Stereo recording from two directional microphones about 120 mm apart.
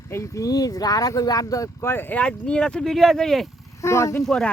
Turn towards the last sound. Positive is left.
turn(degrees=25)  # may be behind; listen again after turning